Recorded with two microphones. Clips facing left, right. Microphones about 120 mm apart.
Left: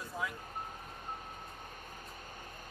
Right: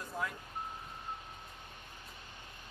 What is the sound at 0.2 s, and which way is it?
Vehicle, centre (ahead or behind).